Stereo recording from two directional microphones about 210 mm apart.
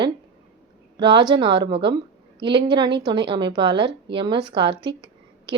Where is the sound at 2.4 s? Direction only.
55° right (ahead or behind).